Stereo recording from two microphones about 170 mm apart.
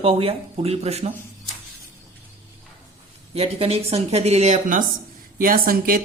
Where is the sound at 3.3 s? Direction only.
35° right (ahead or behind).